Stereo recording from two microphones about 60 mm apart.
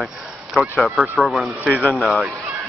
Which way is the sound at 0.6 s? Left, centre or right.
Centre.